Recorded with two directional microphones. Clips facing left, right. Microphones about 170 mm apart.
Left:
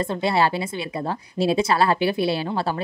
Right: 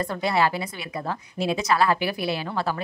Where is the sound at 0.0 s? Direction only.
25° left (ahead or behind).